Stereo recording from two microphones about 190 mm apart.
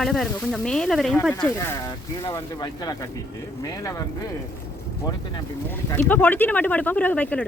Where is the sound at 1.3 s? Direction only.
10° left (ahead or behind).